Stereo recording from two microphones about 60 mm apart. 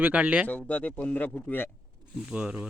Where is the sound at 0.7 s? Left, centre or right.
Left.